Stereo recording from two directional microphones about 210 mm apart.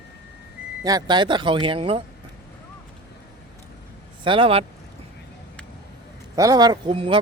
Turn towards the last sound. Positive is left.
turn(degrees=-25)  # may be behind; listen again after turning